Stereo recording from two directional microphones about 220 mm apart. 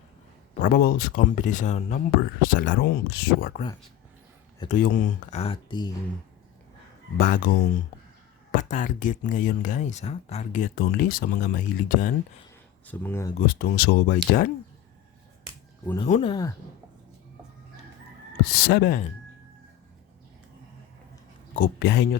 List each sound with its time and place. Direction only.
0.6 s speech: 45° left (ahead or behind)
4.7 s speech: 35° left (ahead or behind); by 5.9 s 20° left (ahead or behind)
7.2 s speech: 40° left (ahead or behind)
12.9 s speech: 10° left (ahead or behind)
13.4 s speech: 45° left (ahead or behind)
16.0 s speech: 30° left (ahead or behind)
16.3 s speech: 15° left (ahead or behind)
18.7 s speech: 45° left (ahead or behind)
21.5 s speech: 50° left (ahead or behind)